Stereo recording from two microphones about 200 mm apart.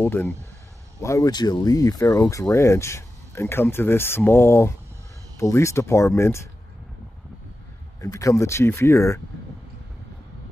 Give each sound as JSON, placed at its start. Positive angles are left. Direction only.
{"t": 0.0, "sound": "speech", "side_deg": 10}
{"t": 8.0, "sound": "speech", "side_deg": 15}